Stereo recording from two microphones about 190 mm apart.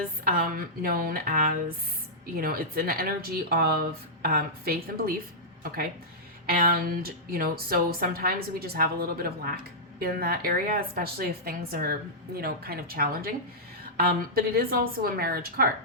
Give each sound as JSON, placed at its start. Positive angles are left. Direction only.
{"t": 0.3, "sound": "a woman's voice", "side_deg": -50}